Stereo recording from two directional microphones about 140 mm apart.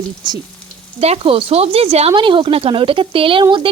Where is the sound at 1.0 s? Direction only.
45° right (ahead or behind).